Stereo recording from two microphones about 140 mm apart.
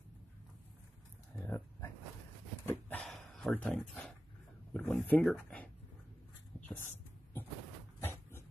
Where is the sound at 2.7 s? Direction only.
10° left (ahead or behind).